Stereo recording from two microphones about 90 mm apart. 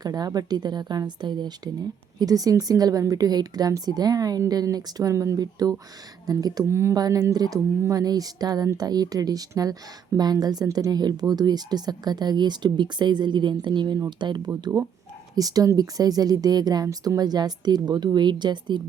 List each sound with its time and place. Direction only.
0.0 s speech: 45° right (ahead or behind)
6.7 s speech: 30° right (ahead or behind)
6.9 s speech: 45° right (ahead or behind)